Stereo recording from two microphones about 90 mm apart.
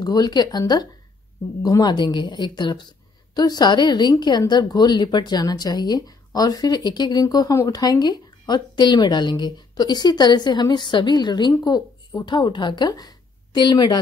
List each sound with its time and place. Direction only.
0.0 s a woman's voice: 50° left (ahead or behind)